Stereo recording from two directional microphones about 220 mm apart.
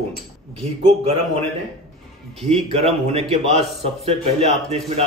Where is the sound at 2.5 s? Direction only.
30° right (ahead or behind).